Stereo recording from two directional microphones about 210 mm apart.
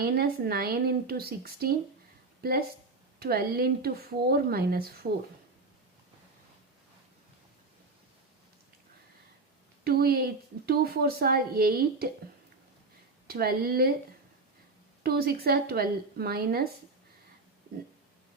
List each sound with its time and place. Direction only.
0.0 s a woman's voice: 45° right (ahead or behind)
9.8 s a woman's voice: 45° right (ahead or behind)
13.2 s a woman's voice: 45° right (ahead or behind)
15.0 s a woman's voice: 45° right (ahead or behind)